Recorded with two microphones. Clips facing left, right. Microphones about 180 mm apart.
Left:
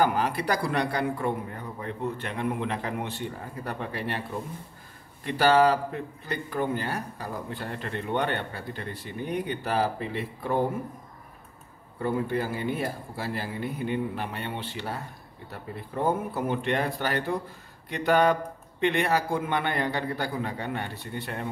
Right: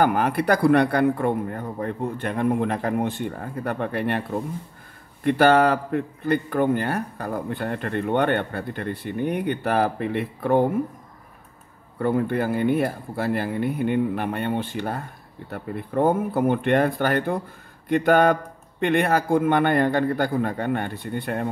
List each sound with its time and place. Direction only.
0.0 s a man's voice: 55° right (ahead or behind)
12.0 s a man's voice: 60° right (ahead or behind)